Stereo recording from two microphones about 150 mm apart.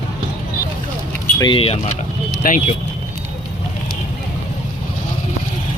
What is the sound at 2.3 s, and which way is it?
Vehicle, 65° left (ahead or behind).